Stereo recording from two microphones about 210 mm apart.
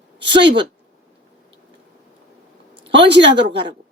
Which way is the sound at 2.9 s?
55° right (ahead or behind).